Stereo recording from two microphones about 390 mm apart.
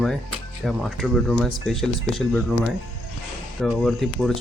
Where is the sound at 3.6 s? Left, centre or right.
Centre.